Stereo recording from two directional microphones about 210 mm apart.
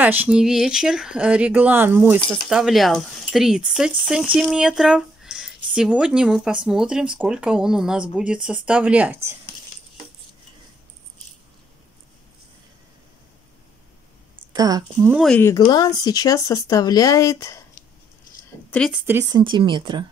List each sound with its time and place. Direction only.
0.0 s speech: 10° right (ahead or behind)
14.5 s speech: 20° right (ahead or behind)
15.0 s speech: 5° right (ahead or behind)
15.3 s speech: 15° left (ahead or behind)
18.7 s a woman's voice: 5° left (ahead or behind)
19.0 s speech: 10° right (ahead or behind)
19.4 s speech: 25° right (ahead or behind)